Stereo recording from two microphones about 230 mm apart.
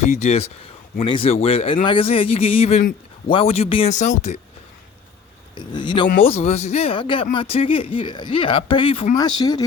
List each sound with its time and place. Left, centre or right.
0.0 s speech: left
5.5 s speech: centre